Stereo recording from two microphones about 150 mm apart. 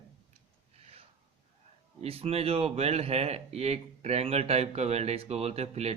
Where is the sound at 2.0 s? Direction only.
40° right (ahead or behind).